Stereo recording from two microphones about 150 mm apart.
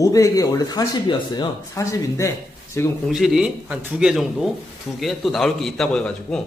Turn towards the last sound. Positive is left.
turn(degrees=5)  # may be behind; listen again after turning